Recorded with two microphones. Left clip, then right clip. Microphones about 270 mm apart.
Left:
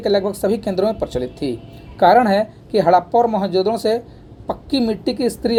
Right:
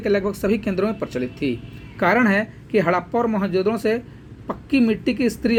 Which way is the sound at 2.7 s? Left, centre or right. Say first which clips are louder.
Left 6 dB; left.